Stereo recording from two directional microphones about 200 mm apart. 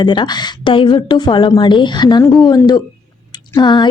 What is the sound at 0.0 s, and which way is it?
A woman's voice, 25° left (ahead or behind).